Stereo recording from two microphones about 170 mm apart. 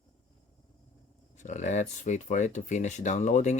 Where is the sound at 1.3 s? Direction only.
45° left (ahead or behind).